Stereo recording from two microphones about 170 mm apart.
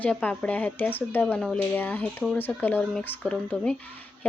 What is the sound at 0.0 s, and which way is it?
Speech, 10° left (ahead or behind).